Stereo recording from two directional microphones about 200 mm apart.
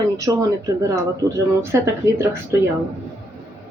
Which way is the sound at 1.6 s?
15° right (ahead or behind).